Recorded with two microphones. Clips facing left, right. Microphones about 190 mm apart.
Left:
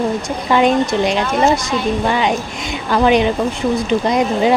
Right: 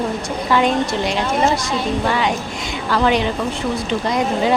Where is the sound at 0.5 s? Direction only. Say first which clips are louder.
Left 4 dB; 20° left (ahead or behind).